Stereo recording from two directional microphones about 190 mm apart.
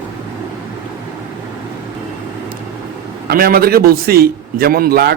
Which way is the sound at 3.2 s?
50° right (ahead or behind).